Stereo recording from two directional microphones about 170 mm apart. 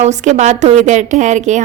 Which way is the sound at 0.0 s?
45° right (ahead or behind).